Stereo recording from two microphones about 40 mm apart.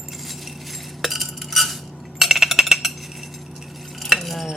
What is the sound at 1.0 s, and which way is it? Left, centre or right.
Cutlery, centre.